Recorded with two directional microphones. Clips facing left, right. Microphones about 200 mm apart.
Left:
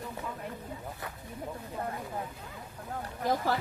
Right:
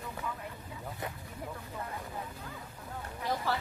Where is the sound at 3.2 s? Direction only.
45° left (ahead or behind).